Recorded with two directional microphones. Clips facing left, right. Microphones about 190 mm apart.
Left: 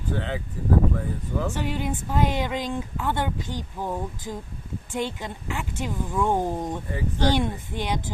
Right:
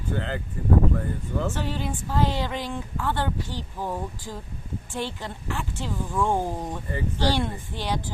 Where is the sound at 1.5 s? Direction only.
15° left (ahead or behind).